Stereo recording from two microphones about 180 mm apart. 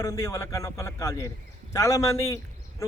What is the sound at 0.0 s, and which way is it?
A man's voice, 15° left (ahead or behind).